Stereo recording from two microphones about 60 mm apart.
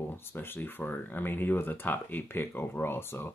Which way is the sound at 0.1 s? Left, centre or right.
Left.